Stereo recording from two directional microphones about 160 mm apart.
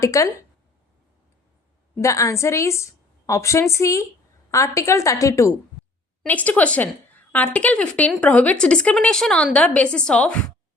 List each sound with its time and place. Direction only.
0.0 s a woman's voice: 20° left (ahead or behind)
2.0 s a woman's voice: 20° left (ahead or behind)
6.2 s a woman's voice: 10° left (ahead or behind)